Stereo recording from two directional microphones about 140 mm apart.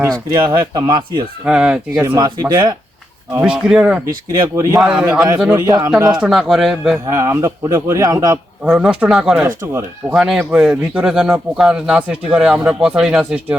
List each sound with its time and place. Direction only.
0.3 s speech: 25° right (ahead or behind)
1.5 s speech: 5° right (ahead or behind)
2.1 s speech: 25° right (ahead or behind)
3.4 s speech: 5° right (ahead or behind)
4.4 s speech: 25° right (ahead or behind)
4.8 s speech: 5° right (ahead or behind)
5.5 s speech: 25° right (ahead or behind)
6.1 s speech: 5° right (ahead or behind)
7.1 s speech: 20° right (ahead or behind)
8.6 s speech: 5° right (ahead or behind)
9.6 s speech: 20° right (ahead or behind)
10.3 s speech: 10° right (ahead or behind)